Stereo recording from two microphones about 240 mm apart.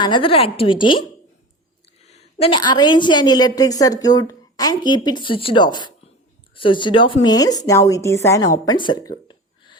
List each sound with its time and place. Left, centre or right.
0.0 s a woman's voice: left
2.0 s a woman's voice: left
8.6 s a sound: centre